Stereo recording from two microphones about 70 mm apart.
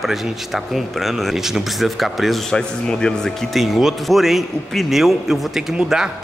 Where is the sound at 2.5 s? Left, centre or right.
Centre.